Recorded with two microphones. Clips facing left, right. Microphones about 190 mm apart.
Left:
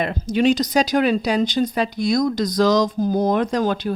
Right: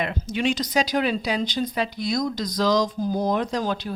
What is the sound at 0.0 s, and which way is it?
A woman's voice, 40° left (ahead or behind).